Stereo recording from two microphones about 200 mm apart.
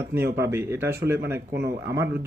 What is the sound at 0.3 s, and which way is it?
Speech, 60° right (ahead or behind).